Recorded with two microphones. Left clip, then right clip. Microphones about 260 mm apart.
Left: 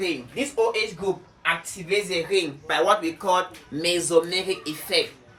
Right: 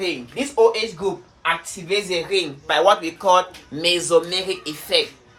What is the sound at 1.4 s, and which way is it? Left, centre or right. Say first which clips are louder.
Speech: right 3 dB; centre.